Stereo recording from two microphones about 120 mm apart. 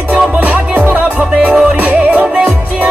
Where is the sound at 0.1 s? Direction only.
15° right (ahead or behind).